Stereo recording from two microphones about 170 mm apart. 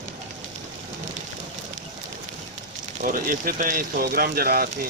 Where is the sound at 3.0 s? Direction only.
50° right (ahead or behind).